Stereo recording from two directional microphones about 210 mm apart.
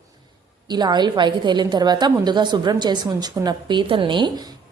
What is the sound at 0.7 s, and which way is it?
A woman's voice, 20° right (ahead or behind).